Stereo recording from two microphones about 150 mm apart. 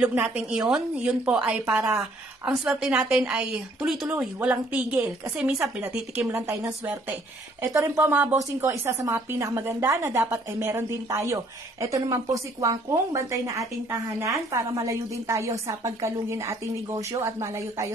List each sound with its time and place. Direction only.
0.0 s a woman's voice: 10° right (ahead or behind)